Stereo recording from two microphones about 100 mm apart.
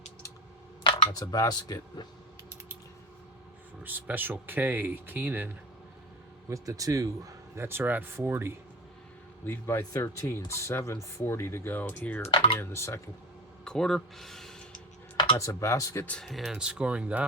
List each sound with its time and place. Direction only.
1.2 s speech: 35° left (ahead or behind)
3.8 s speech: 20° right (ahead or behind)
6.5 s speech: 35° right (ahead or behind)
9.5 s speech: 25° left (ahead or behind)
12.3 s speech: 60° left (ahead or behind)
12.5 s speech: 25° left (ahead or behind)
13.7 s speech: 5° left (ahead or behind)
15.4 s speech: 30° left (ahead or behind)
16.0 s speech: 10° left (ahead or behind)
16.3 s speech: 5° right (ahead or behind)